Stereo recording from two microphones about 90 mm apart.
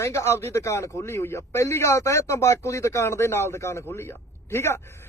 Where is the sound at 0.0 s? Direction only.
30° left (ahead or behind).